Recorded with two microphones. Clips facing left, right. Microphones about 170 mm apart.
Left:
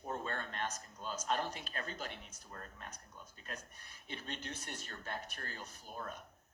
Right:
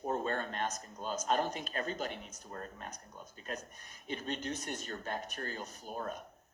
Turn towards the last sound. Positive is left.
turn(degrees=-35)  # may be behind; listen again after turning